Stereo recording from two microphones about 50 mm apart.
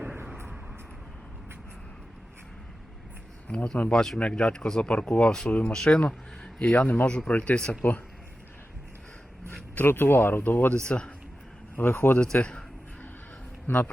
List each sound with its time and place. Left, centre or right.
0.0 s vehicle: right
3.5 s speech: centre
4.2 s speech: centre
5.5 s a man's voice: left
5.7 s a man's voice: centre
9.7 s speech: left
10.8 s speech: centre
11.8 s speech: left
12.2 s a man's voice: left
13.7 s speech: left